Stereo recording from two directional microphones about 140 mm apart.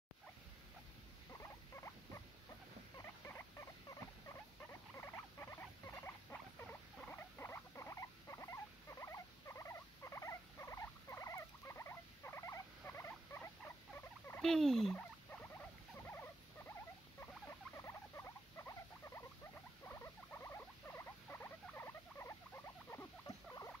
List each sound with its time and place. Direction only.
1.3 s rodents: 20° left (ahead or behind)
3.0 s rodents: 15° left (ahead or behind)
4.9 s rodents: 20° left (ahead or behind)
14.4 s fowl: 5° left (ahead or behind)
16.1 s rodents: 15° left (ahead or behind)